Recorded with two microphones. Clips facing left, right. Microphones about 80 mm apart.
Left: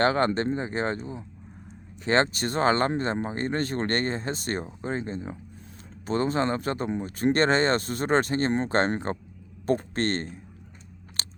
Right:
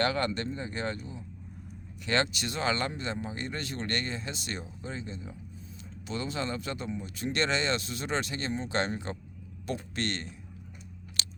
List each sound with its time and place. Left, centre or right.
0.0 s speech: left
11.2 s chewing: left